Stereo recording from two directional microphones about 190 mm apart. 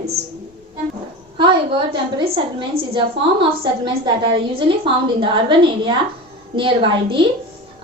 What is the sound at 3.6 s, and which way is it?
A woman's voice, 25° right (ahead or behind).